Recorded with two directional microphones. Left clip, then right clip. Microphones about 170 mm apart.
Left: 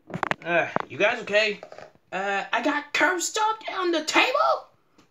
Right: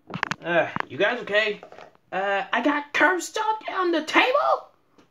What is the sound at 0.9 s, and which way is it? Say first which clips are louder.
A child's voice: even; 25° right (ahead or behind).